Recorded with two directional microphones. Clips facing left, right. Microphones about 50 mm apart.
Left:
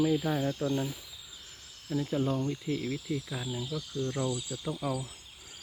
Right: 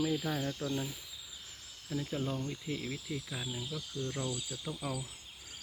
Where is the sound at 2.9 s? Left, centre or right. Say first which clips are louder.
Left 6 dB; centre.